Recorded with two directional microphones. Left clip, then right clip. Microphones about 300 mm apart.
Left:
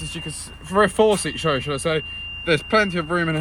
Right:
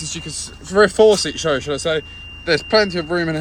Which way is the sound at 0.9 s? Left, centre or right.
Left.